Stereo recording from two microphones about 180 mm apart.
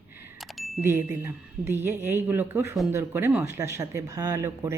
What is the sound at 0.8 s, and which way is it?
Speech, 15° right (ahead or behind).